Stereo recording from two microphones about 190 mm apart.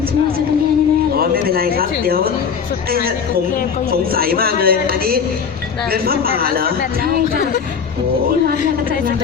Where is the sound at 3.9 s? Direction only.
50° right (ahead or behind).